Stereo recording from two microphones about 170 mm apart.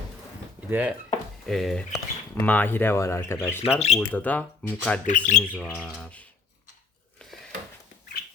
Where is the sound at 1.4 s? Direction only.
Centre (ahead or behind).